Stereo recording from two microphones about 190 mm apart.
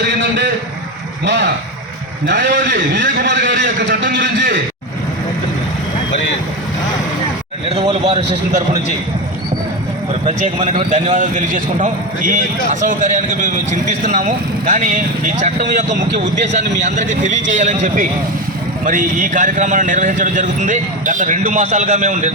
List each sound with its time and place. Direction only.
0.0 s a sound: 65° right (ahead or behind)
1.2 s a man's voice: 65° right (ahead or behind)
8.0 s a man's voice: 35° right (ahead or behind)
10.2 s a man's voice: 40° right (ahead or behind)